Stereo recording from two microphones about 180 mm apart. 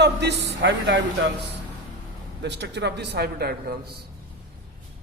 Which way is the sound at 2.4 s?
75° right (ahead or behind).